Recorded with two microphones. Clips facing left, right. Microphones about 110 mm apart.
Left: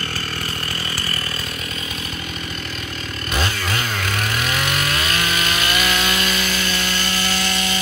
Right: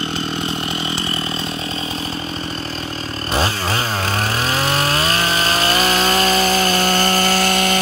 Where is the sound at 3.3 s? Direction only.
35° right (ahead or behind).